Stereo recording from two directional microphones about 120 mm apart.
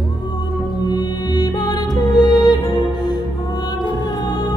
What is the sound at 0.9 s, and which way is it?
Music, 35° left (ahead or behind).